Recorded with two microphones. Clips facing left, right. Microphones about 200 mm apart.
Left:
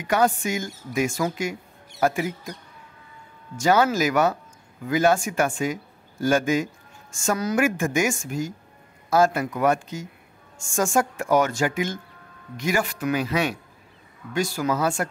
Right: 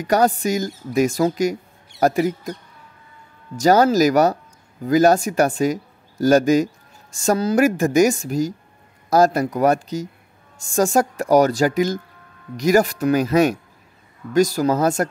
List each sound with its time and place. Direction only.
0.0 s speech: 40° right (ahead or behind)
3.5 s speech: 40° right (ahead or behind)